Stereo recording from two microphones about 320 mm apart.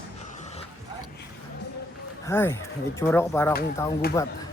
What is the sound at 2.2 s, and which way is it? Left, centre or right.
A man's voice, centre.